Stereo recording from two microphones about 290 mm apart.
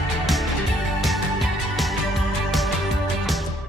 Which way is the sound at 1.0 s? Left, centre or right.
Centre.